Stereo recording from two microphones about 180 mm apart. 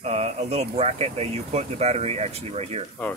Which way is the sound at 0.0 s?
35° right (ahead or behind).